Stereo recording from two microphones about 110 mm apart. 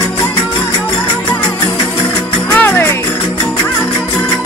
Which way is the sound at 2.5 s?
20° left (ahead or behind).